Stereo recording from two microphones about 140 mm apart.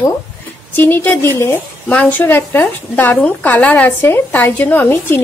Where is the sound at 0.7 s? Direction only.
15° left (ahead or behind).